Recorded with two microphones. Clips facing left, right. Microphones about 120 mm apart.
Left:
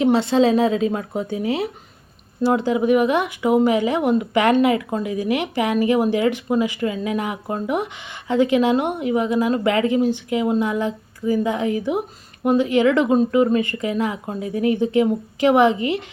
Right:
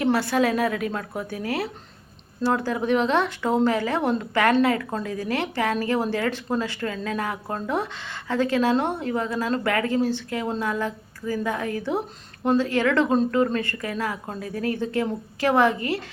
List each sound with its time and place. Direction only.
0.0 s a woman's voice: 20° left (ahead or behind)